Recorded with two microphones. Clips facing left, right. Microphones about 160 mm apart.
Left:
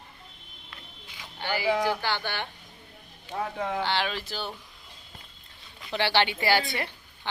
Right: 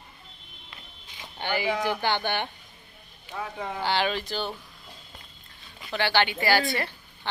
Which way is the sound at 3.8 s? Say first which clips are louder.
Right 6 dB; centre (ahead or behind).